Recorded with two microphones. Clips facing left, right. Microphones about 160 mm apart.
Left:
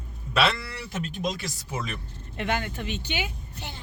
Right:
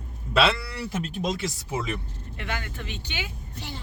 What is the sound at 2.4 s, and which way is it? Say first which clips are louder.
Speech: left 5 dB; 20° left (ahead or behind).